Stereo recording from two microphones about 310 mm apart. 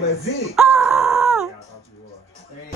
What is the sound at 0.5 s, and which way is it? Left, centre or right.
Speech, centre.